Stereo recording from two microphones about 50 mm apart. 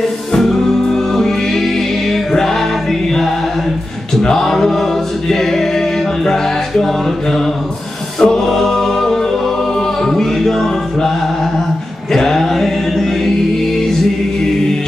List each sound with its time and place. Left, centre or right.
0.4 s music: centre
8.2 s music: centre
12.1 s music: centre